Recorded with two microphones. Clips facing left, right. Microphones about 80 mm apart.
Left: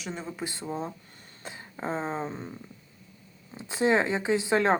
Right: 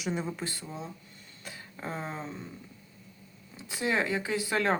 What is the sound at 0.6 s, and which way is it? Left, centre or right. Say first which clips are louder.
Speech: left 7 dB; left.